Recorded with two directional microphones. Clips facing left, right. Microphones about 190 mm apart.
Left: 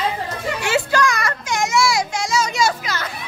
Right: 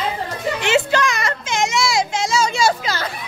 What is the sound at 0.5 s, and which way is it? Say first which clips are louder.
Music: right 1 dB; 25° right (ahead or behind).